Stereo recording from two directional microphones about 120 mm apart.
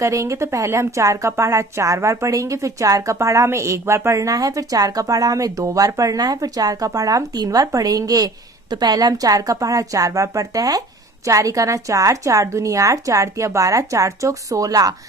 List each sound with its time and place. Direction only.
0.0 s a woman's voice: 25° right (ahead or behind)